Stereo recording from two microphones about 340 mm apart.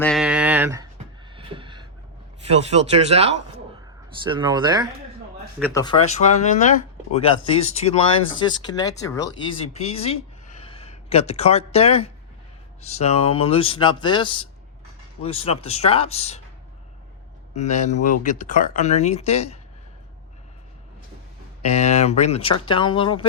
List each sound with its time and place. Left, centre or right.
0.0 s a sound: centre
2.5 s speech: centre
5.7 s speech: centre
7.8 s speech: centre
17.5 s speech: left
21.6 s speech: centre